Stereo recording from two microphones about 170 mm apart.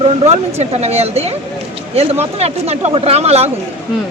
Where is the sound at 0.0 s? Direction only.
40° right (ahead or behind).